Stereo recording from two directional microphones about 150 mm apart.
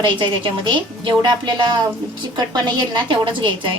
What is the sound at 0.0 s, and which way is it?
A woman's voice, 35° right (ahead or behind).